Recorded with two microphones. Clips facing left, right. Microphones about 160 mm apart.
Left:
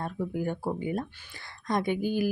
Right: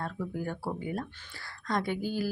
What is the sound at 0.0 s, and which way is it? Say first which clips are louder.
A woman's voice: left 4 dB; 20° left (ahead or behind).